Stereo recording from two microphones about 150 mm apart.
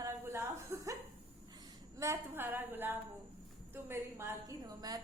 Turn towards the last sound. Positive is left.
turn(degrees=-25)  # may be behind; listen again after turning